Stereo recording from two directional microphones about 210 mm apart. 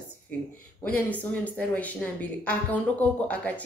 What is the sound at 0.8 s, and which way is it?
A woman's voice, 5° left (ahead or behind).